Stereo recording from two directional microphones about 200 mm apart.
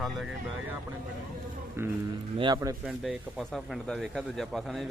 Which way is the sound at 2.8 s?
Centre (ahead or behind).